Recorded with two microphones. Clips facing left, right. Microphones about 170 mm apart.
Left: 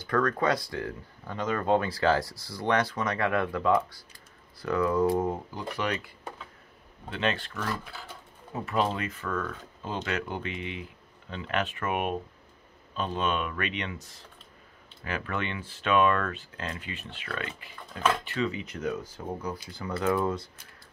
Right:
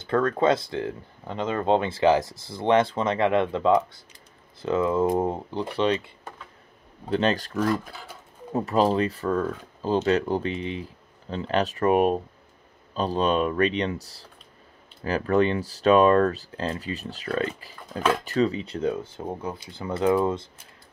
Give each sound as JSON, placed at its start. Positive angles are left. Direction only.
{"t": 0.0, "sound": "speech", "side_deg": -25}